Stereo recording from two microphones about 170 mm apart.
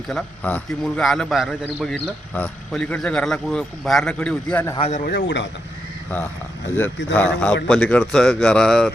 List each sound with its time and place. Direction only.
0.1 s a man's voice: 5° left (ahead or behind)
4.8 s speech: 45° left (ahead or behind)
5.0 s speech: 85° left
7.1 s a man's voice: 10° left (ahead or behind)